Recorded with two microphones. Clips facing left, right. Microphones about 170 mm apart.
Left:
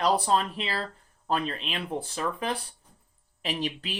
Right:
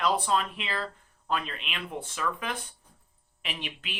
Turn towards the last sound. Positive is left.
turn(degrees=35)  # may be behind; listen again after turning